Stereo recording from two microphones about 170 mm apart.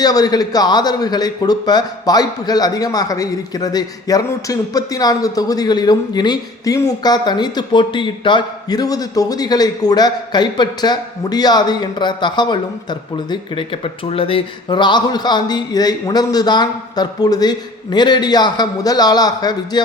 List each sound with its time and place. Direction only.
0.0 s a man's voice: 20° left (ahead or behind)